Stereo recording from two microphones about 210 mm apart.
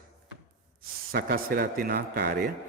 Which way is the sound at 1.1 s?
45° right (ahead or behind).